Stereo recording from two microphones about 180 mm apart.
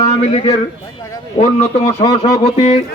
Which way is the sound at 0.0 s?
35° left (ahead or behind).